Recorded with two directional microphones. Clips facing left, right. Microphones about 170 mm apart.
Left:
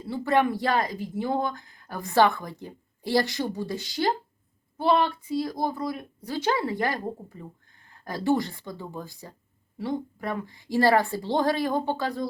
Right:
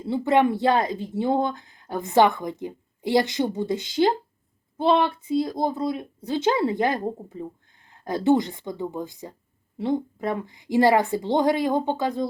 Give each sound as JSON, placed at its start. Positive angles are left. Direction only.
{"t": 0.0, "sound": "speech", "side_deg": -20}